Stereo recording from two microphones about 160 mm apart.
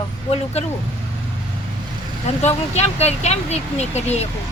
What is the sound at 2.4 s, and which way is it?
Speech, 40° left (ahead or behind).